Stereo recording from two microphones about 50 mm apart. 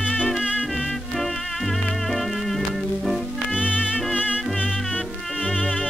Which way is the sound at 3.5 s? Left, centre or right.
Centre.